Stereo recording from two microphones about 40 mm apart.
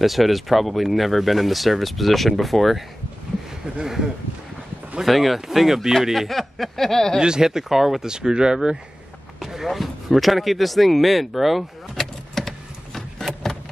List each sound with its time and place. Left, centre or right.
0.0 s speech: centre
3.8 s speech: centre
7.2 s speech: centre
8.1 s speech: centre
9.4 s a sound: centre